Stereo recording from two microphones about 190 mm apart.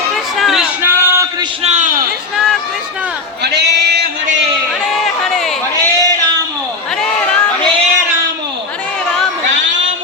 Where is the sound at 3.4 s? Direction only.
60° right (ahead or behind).